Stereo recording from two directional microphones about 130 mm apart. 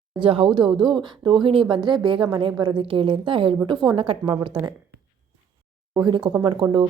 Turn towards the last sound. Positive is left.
turn(degrees=-40)  # may be behind; listen again after turning